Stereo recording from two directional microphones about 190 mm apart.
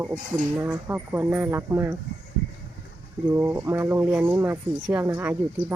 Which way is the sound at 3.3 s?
15° right (ahead or behind).